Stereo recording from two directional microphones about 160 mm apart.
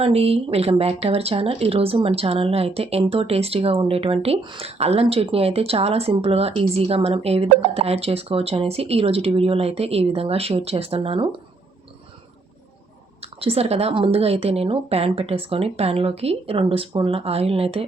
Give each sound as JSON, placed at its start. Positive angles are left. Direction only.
{"t": 0.0, "sound": "speech", "side_deg": -40}
{"t": 13.4, "sound": "speech", "side_deg": -40}